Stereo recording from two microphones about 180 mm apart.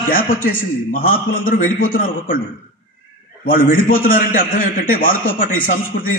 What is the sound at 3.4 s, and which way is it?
A man's voice, 50° left (ahead or behind).